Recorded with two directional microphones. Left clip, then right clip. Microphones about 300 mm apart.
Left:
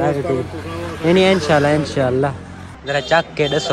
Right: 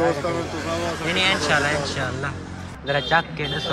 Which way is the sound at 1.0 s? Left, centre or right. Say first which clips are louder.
Left 7 dB; centre.